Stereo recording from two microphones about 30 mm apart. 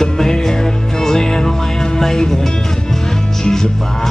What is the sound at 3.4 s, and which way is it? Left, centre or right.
Music, left.